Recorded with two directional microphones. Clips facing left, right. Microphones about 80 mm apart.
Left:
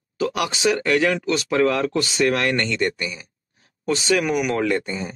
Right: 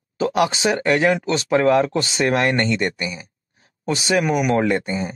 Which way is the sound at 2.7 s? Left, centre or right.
Centre.